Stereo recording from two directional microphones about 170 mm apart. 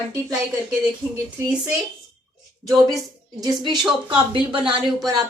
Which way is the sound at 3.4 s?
25° right (ahead or behind).